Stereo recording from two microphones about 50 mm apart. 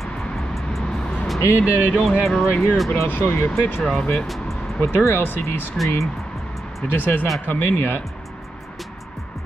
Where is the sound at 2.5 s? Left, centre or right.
Left.